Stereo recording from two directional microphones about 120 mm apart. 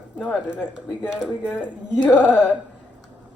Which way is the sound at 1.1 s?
10° left (ahead or behind).